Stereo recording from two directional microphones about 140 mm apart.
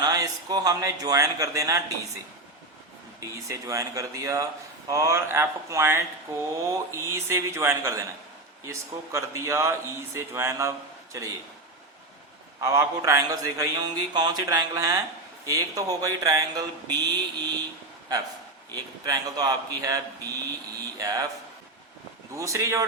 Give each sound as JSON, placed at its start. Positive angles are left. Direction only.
{"t": 0.0, "sound": "a man's voice", "side_deg": -25}
{"t": 3.2, "sound": "a man's voice", "side_deg": -25}
{"t": 12.5, "sound": "a man's voice", "side_deg": -25}
{"t": 18.7, "sound": "a man's voice", "side_deg": -25}
{"t": 22.4, "sound": "a man's voice", "side_deg": -20}